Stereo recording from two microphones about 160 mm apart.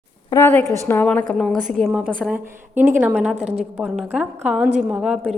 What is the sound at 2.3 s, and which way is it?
Speech, 10° right (ahead or behind).